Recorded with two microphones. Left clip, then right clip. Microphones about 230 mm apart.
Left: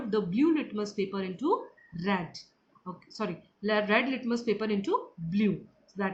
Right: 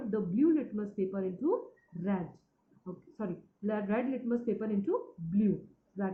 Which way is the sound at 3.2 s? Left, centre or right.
Left.